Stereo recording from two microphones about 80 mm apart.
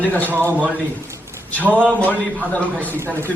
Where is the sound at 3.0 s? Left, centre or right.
Right.